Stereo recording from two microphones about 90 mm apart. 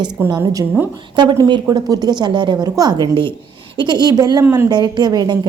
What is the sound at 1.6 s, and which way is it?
A woman's voice, 45° right (ahead or behind).